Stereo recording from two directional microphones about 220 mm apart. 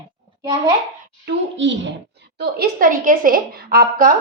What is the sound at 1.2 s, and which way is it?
A woman's voice, 55° right (ahead or behind).